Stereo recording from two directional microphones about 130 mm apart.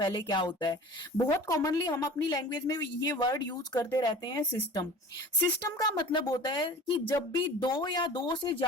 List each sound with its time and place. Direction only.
0.0 s a woman's voice: 35° left (ahead or behind)